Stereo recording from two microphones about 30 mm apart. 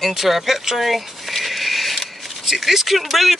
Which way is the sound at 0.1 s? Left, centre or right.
Centre.